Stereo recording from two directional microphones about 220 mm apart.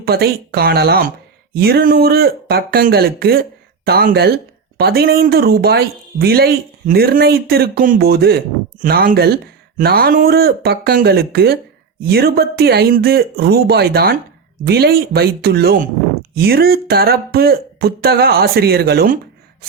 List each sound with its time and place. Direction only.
0.0 s speech: 45° right (ahead or behind)